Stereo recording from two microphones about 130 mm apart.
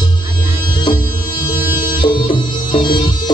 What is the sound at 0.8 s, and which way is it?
Music, 35° left (ahead or behind).